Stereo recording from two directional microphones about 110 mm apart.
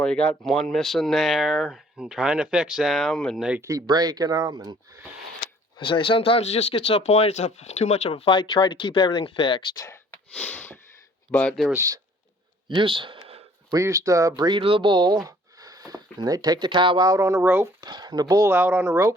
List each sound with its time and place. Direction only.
0.0 s speech: 10° left (ahead or behind)
3.6 s speech: 30° right (ahead or behind)
5.7 s speech: 55° left (ahead or behind)
10.1 s sneeze: 15° left (ahead or behind)
11.3 s speech: 15° left (ahead or behind)
11.7 s speech: 25° right (ahead or behind)
12.6 s speech: 50° right (ahead or behind)
13.1 s a sound: 65° right (ahead or behind)
13.7 s speech: 30° right (ahead or behind)
14.6 s speech: 50° right (ahead or behind); by 17.7 s 20° right (ahead or behind)
17.7 s speech: 40° right (ahead or behind)
18.5 s speech: 15° right (ahead or behind)